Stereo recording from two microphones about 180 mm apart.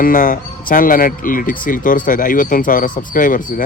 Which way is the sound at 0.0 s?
50° left (ahead or behind).